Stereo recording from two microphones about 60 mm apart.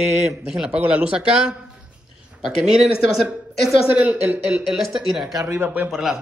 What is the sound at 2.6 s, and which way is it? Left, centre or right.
Speech, centre.